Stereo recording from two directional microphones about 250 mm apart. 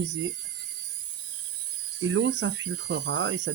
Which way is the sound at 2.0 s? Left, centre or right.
Right.